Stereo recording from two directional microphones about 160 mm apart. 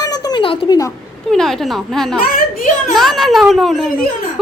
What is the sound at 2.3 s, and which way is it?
Speech, 65° left (ahead or behind).